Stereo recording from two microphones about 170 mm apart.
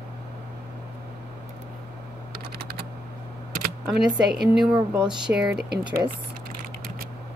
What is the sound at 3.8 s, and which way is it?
A woman's voice, centre (ahead or behind).